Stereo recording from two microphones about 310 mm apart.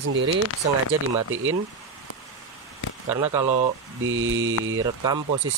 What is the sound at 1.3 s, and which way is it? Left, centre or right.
Mantra, right.